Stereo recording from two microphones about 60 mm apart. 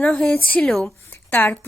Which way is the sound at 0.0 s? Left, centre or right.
Centre.